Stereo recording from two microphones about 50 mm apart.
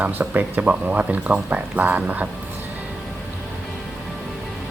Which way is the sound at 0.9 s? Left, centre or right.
Right.